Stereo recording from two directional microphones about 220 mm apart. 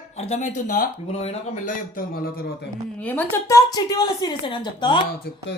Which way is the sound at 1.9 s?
40° left (ahead or behind).